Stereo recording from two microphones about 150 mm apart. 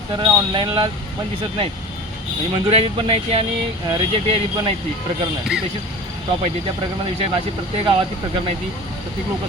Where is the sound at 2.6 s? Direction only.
40° right (ahead or behind).